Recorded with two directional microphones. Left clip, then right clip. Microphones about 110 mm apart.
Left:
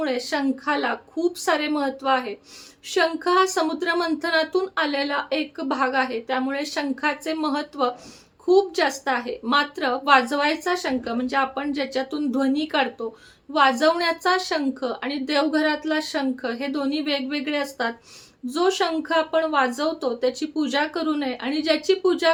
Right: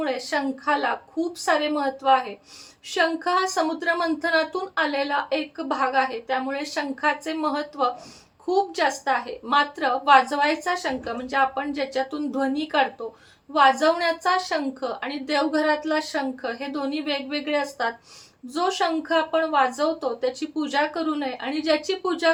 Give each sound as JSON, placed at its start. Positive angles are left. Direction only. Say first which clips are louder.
{"t": 0.0, "sound": "speech", "louder": "left 1 dB", "side_deg": 35}